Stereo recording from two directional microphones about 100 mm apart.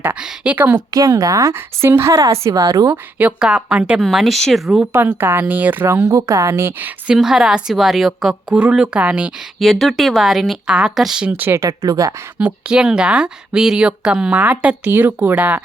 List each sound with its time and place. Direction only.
0.0 s a sound: 15° right (ahead or behind)
0.9 s a woman's voice: 35° right (ahead or behind)
1.5 s a woman's voice: 25° right (ahead or behind)
2.9 s a woman's voice: 15° right (ahead or behind)
4.9 s speech: 20° right (ahead or behind)
6.1 s speech: 35° right (ahead or behind); by 7.2 s 20° right (ahead or behind)
7.2 s a woman's voice: 5° right (ahead or behind)
9.6 s a woman's voice: centre (ahead or behind)
11.3 s speech: 20° right (ahead or behind); by 12.1 s 35° right (ahead or behind)
12.4 s speech: 15° right (ahead or behind)